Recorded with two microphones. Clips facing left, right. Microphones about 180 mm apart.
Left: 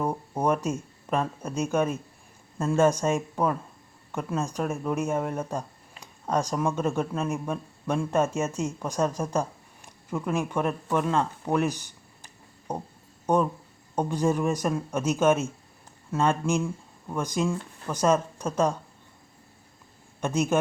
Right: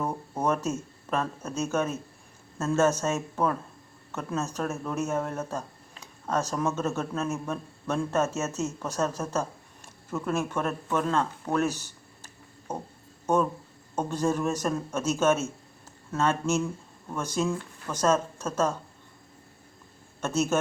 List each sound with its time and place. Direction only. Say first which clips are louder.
0.0 s speech: left 2 dB; 10° left (ahead or behind)
20.2 s speech: left 1 dB; 10° left (ahead or behind)